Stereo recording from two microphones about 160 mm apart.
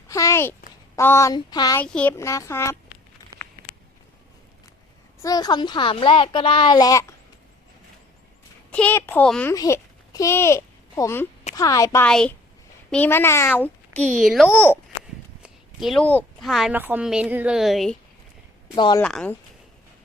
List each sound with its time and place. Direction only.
0.1 s speech: 20° left (ahead or behind)
1.8 s speech: 10° left (ahead or behind)
2.1 s speech: 20° left (ahead or behind)
5.2 s speech: 25° left (ahead or behind)
8.7 s speech: 10° left (ahead or behind)
9.5 s a child's voice: 15° left (ahead or behind)
12.0 s a woman's voice: 5° left (ahead or behind)
14.5 s speech: 15° left (ahead or behind)
15.4 s a sound: centre (ahead or behind)
16.0 s speech: 10° left (ahead or behind)
16.5 s a woman's voice: centre (ahead or behind)
18.7 s speech: 30° left (ahead or behind)
19.0 s a woman's voice: 5° left (ahead or behind)